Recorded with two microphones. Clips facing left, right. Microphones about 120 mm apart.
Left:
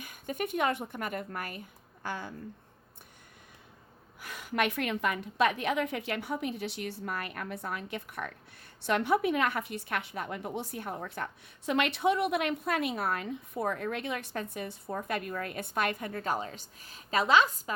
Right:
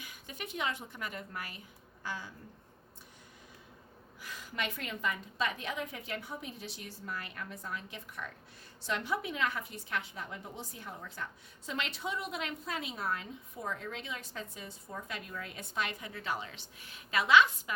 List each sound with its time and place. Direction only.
0.0 s a woman's voice: 50° left (ahead or behind)
4.2 s a woman's voice: 65° left (ahead or behind); by 17.7 s 40° left (ahead or behind)